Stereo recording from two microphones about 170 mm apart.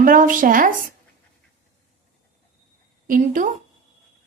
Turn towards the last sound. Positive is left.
turn(degrees=-50)  # may be behind; listen again after turning